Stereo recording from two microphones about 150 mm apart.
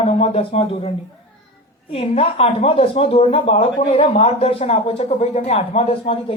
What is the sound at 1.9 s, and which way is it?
Speech, 40° left (ahead or behind).